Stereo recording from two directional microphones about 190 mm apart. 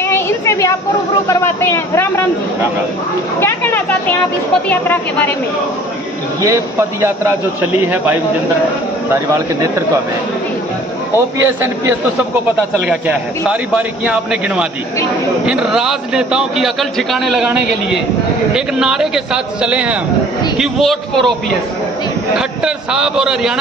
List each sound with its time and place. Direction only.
0.0 s a sound: 10° left (ahead or behind)
1.2 s speech: 15° left (ahead or behind)
3.3 s speech: 10° left (ahead or behind)
6.4 s a man's voice: 15° right (ahead or behind)
9.1 s a man's voice: 15° right (ahead or behind)
11.1 s a man's voice: 15° right (ahead or behind)
12.8 s a man's voice: 5° right (ahead or behind)
18.5 s a man's voice: 5° right (ahead or behind)
22.4 s a man's voice: 5° right (ahead or behind)